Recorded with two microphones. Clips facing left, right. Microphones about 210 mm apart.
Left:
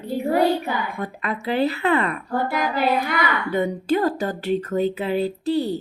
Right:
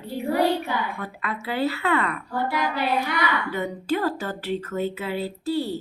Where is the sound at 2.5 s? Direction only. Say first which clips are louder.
Left 2 dB; 45° left (ahead or behind).